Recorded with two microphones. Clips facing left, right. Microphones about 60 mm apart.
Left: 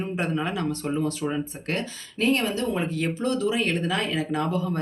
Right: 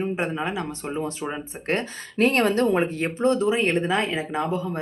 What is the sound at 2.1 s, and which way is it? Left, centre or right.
Speech, right.